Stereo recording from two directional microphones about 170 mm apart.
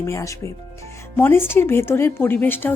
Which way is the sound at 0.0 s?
20° left (ahead or behind).